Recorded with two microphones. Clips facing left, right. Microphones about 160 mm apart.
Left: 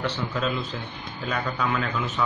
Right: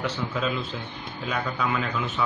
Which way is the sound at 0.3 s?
10° right (ahead or behind).